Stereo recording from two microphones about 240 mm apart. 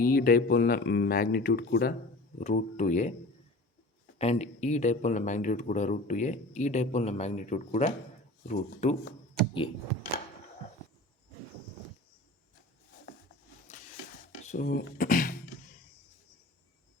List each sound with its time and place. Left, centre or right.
0.0 s speech: left
4.2 s speech: left
14.4 s speech: left